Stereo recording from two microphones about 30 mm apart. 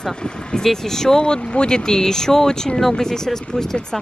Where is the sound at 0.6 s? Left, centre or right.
Centre.